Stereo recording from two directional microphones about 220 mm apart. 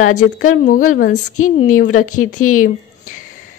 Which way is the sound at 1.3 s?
80° left.